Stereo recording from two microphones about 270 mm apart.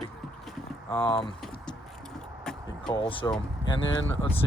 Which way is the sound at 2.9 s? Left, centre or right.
Centre.